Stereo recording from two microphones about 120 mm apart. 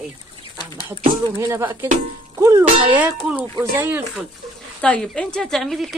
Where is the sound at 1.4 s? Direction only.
25° right (ahead or behind).